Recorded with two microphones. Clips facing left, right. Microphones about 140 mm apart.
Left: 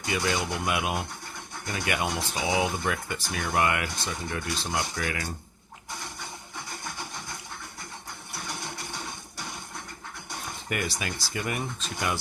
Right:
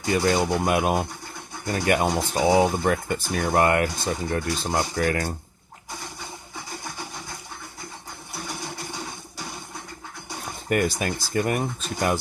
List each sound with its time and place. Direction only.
0.0 s speech: 40° right (ahead or behind)
8.3 s vehicle: 10° right (ahead or behind)
10.7 s speech: 45° right (ahead or behind)